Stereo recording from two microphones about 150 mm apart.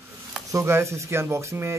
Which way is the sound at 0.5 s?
20° right (ahead or behind).